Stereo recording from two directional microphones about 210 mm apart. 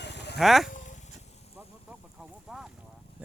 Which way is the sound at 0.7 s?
35° left (ahead or behind).